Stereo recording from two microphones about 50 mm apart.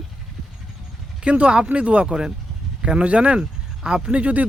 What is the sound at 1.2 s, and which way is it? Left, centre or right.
Speech, right.